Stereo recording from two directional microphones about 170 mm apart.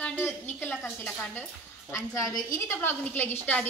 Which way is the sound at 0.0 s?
10° left (ahead or behind).